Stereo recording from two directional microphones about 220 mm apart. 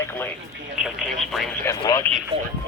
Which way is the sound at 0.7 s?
Centre (ahead or behind).